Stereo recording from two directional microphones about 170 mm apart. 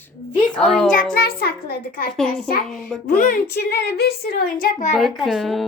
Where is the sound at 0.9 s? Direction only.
50° left (ahead or behind).